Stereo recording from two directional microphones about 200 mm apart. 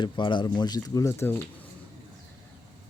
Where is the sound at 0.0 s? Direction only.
25° left (ahead or behind).